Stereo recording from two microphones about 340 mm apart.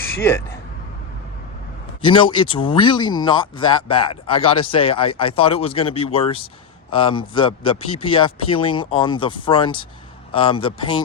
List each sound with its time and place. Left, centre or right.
2.0 s speech: centre